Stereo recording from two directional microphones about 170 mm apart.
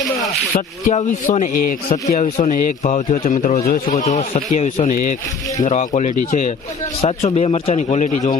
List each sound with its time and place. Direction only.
0.5 s a man's voice: 45° left (ahead or behind)
2.0 s a man's voice: 40° left (ahead or behind)